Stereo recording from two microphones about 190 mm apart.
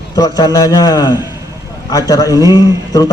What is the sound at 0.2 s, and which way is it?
A man's voice, 20° left (ahead or behind).